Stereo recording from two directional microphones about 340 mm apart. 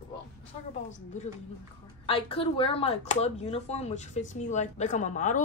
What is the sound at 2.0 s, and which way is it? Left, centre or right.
Speech, centre.